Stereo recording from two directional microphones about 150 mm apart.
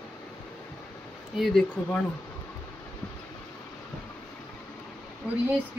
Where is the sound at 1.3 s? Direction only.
Centre (ahead or behind).